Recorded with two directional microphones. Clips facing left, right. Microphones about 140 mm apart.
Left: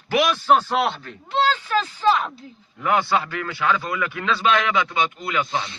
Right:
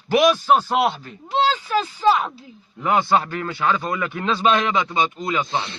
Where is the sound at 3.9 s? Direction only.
35° right (ahead or behind).